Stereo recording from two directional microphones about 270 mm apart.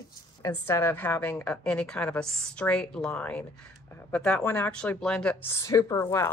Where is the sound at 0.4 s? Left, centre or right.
Centre.